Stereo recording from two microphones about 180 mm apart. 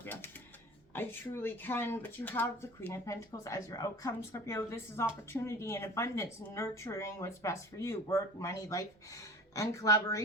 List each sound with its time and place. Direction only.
0.0 s typing: 10° left (ahead or behind)
0.9 s speech: 10° left (ahead or behind)